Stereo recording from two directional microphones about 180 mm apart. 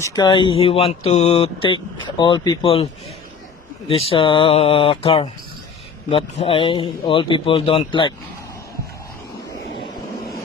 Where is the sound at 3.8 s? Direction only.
30° left (ahead or behind).